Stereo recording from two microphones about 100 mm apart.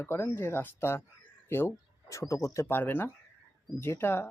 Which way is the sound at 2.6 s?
20° left (ahead or behind).